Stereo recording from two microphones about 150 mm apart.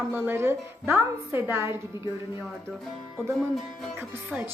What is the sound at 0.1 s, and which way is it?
A woman's voice, 15° right (ahead or behind).